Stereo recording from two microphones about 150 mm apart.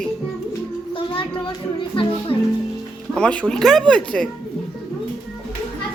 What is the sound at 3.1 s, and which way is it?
Speech, 10° left (ahead or behind).